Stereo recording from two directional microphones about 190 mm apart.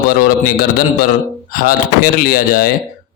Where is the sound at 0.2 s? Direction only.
50° left (ahead or behind).